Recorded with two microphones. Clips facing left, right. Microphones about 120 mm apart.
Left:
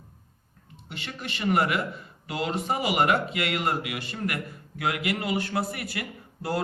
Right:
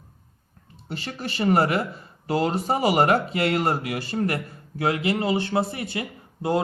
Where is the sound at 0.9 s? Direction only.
35° right (ahead or behind).